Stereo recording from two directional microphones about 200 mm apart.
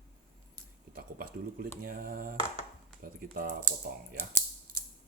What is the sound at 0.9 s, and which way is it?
Speech, 50° right (ahead or behind).